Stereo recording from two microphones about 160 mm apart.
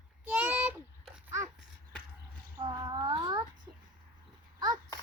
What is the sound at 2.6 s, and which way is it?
Child singing, 25° right (ahead or behind).